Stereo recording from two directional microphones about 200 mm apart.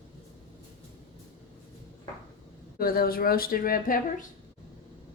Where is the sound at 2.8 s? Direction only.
45° left (ahead or behind).